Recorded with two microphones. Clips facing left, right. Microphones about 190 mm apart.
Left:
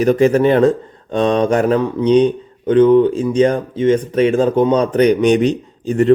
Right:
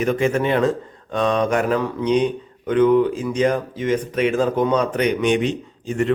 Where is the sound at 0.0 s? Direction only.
35° left (ahead or behind).